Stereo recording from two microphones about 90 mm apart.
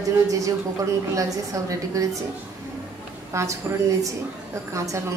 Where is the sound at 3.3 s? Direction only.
35° right (ahead or behind).